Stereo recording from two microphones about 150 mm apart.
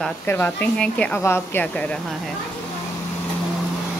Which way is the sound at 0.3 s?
10° left (ahead or behind).